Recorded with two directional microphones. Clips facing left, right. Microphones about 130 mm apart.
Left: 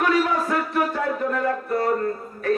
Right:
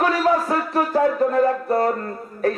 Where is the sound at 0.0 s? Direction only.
35° right (ahead or behind).